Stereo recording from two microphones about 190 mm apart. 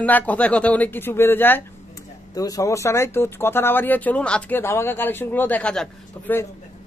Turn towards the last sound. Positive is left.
turn(degrees=10)  # may be behind; listen again after turning